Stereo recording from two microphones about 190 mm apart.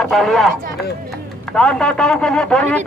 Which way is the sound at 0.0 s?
Centre (ahead or behind).